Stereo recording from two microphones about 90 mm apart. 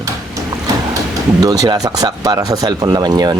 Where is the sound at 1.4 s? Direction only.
45° right (ahead or behind).